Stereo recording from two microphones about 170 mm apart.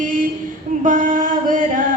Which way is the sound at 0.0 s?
55° right (ahead or behind).